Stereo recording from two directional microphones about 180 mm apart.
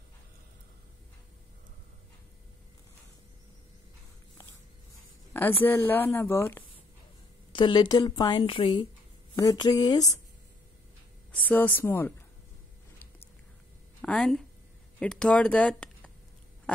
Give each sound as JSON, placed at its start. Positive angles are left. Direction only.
{"t": 5.3, "sound": "a woman's voice", "side_deg": 10}
{"t": 7.5, "sound": "a woman's voice", "side_deg": 25}
{"t": 11.3, "sound": "a woman's voice", "side_deg": 10}
{"t": 14.0, "sound": "a woman's voice", "side_deg": 0}